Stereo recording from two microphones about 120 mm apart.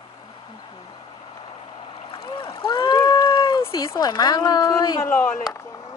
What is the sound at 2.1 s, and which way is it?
Speech, 45° left (ahead or behind).